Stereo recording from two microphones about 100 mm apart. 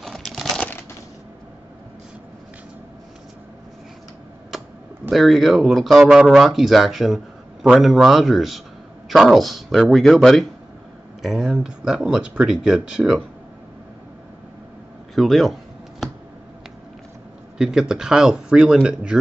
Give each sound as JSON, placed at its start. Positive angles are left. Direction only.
{"t": 0.0, "sound": "crumpling", "side_deg": 0}
{"t": 5.1, "sound": "speech", "side_deg": 0}
{"t": 15.1, "sound": "speech", "side_deg": 0}
{"t": 17.6, "sound": "speech", "side_deg": -5}